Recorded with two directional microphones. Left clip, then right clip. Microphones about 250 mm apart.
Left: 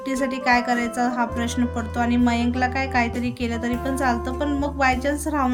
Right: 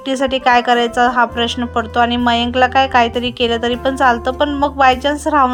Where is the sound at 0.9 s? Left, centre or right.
Right.